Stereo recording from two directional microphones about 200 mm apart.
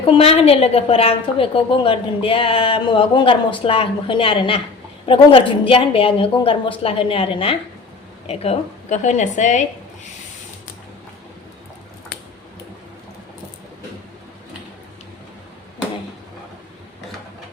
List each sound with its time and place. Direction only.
0.0 s a woman's voice: 30° left (ahead or behind)